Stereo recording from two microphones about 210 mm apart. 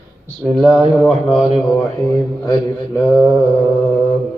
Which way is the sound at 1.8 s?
15° left (ahead or behind).